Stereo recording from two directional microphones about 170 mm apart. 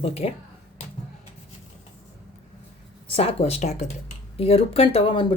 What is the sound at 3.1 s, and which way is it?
A woman's voice, 35° left (ahead or behind).